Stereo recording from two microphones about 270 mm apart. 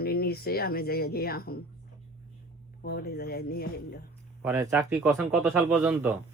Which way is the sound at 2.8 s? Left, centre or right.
Left.